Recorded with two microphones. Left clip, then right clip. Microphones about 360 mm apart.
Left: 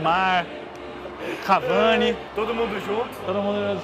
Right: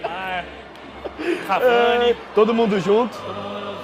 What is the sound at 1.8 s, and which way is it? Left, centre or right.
Speech, left.